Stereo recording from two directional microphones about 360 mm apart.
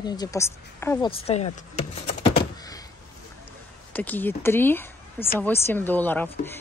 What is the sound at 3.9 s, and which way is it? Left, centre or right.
Speech, centre.